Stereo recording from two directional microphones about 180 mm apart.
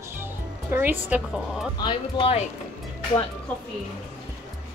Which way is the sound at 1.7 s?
25° left (ahead or behind).